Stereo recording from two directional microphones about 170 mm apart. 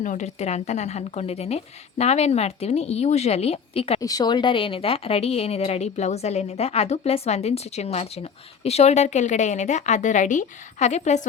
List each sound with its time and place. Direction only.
0.0 s a woman's voice: 45° left (ahead or behind)
4.0 s a woman's voice: 25° left (ahead or behind); by 11.3 s 40° left (ahead or behind)